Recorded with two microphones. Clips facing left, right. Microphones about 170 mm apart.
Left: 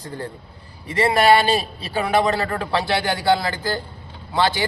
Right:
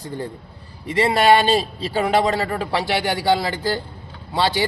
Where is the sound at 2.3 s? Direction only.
15° right (ahead or behind).